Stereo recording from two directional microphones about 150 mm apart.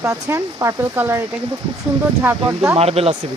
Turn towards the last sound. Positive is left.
turn(degrees=-40)  # may be behind; listen again after turning